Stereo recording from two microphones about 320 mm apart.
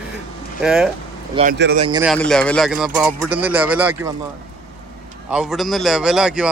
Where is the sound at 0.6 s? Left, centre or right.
Centre.